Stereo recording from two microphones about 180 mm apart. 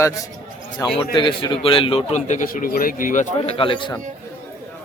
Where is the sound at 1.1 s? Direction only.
30° left (ahead or behind); by 3.5 s 45° left (ahead or behind).